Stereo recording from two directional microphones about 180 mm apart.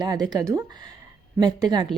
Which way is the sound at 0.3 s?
20° right (ahead or behind).